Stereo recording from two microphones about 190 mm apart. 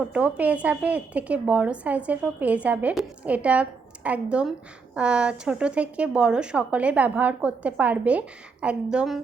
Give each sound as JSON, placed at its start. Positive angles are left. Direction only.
{"t": 0.1, "sound": "a woman's voice", "side_deg": -5}